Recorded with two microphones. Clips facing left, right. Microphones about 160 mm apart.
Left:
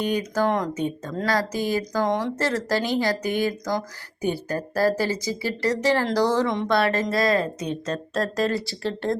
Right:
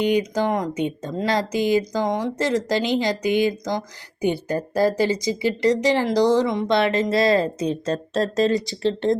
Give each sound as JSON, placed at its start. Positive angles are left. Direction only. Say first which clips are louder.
{"t": 0.0, "sound": "speech", "louder": "right 3 dB", "side_deg": -15}